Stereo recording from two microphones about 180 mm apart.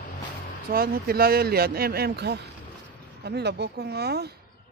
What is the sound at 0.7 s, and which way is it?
Speech, 55° right (ahead or behind).